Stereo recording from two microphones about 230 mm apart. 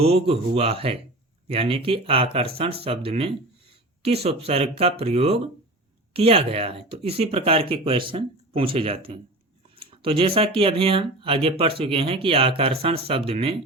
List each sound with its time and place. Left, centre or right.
0.0 s speech: right